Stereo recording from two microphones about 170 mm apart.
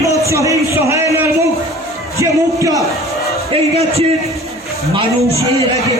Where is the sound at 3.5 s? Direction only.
35° right (ahead or behind).